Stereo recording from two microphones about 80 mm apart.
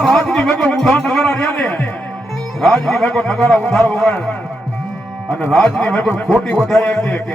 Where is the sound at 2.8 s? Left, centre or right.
Centre.